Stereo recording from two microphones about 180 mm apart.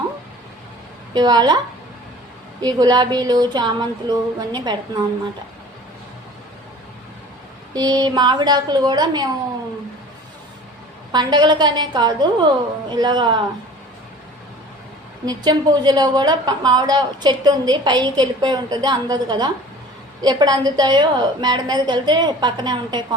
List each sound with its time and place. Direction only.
1.1 s a woman's voice: 25° right (ahead or behind)
7.7 s a woman's voice: 20° right (ahead or behind)
11.1 s a woman's voice: 25° right (ahead or behind)
15.3 s a woman's voice: 25° right (ahead or behind)